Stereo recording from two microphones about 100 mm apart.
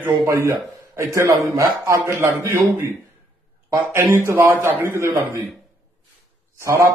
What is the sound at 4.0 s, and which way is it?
A man's voice, 30° right (ahead or behind).